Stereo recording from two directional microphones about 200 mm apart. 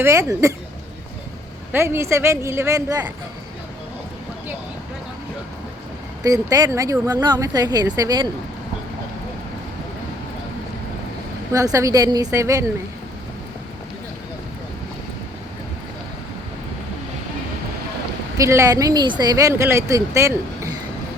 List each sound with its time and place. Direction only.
0.0 s speech: 15° right (ahead or behind)
1.7 s speech: 10° right (ahead or behind)
6.2 s speech: 15° right (ahead or behind)
11.5 s speech: 15° right (ahead or behind)
18.3 s speech: 15° right (ahead or behind)